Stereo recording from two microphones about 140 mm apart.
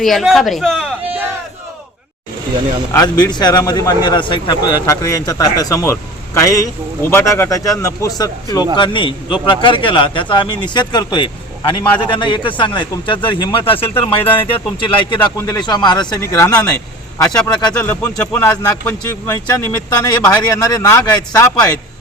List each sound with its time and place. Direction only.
0.0 s speech: centre (ahead or behind)
2.9 s speech: 30° left (ahead or behind)
7.0 s speech: 20° left (ahead or behind)